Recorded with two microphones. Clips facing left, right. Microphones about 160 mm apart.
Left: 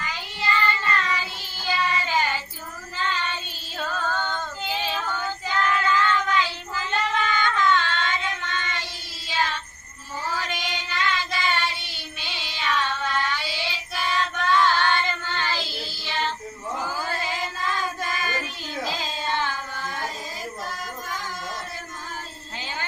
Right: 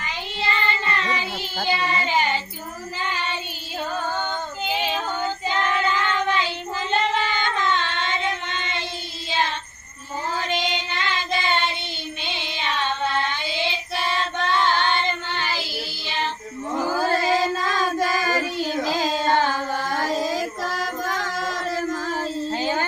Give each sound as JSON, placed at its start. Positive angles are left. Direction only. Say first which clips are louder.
{"t": 0.0, "sound": "child singing", "louder": "right 2 dB", "side_deg": -20}
{"t": 3.8, "sound": "female singing", "louder": "right 1 dB", "side_deg": -20}
{"t": 9.3, "sound": "child singing", "louder": "right 2 dB", "side_deg": -25}
{"t": 16.9, "sound": "child singing", "louder": "right 9 dB", "side_deg": -90}
{"t": 19.0, "sound": "carnatic music", "louder": "right 8 dB", "side_deg": -90}
{"t": 19.5, "sound": "music", "louder": "right 7 dB", "side_deg": -90}
{"t": 22.5, "sound": "a sound", "louder": "right 9 dB", "side_deg": -45}